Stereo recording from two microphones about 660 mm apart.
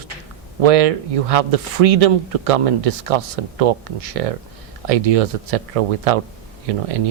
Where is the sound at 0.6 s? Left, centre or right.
Right.